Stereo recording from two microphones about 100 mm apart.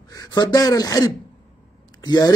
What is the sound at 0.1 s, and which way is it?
A man's voice, 40° left (ahead or behind).